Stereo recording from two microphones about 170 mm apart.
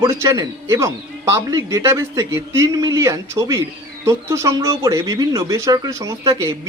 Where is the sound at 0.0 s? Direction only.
20° right (ahead or behind).